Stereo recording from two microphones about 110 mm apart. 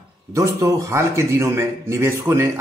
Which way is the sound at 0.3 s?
25° right (ahead or behind).